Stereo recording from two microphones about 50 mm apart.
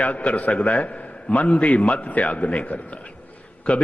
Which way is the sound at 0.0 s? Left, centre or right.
Left.